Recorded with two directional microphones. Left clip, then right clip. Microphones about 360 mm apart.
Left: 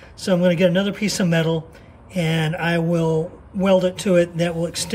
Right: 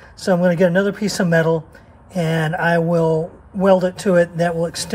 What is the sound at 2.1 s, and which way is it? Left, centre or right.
A man's voice, right.